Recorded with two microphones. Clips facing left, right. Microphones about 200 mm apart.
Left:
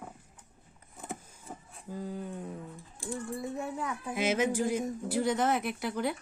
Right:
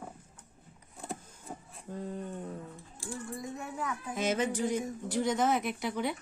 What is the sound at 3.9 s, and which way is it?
Speech, 10° left (ahead or behind).